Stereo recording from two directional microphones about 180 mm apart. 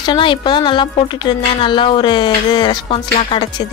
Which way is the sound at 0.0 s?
25° left (ahead or behind).